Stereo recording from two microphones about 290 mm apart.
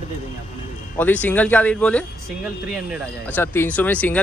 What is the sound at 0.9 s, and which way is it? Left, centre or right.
Speech, centre.